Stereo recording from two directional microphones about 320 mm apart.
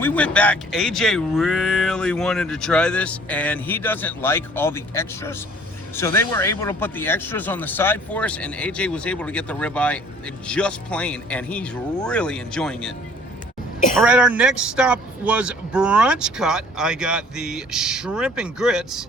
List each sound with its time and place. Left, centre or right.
0.0 s speech: centre
13.9 s speech: centre